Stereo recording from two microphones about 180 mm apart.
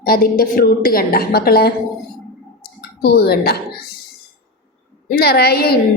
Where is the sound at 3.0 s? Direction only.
60° left (ahead or behind).